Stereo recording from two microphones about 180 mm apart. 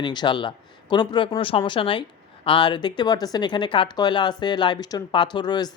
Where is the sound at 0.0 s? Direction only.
25° left (ahead or behind).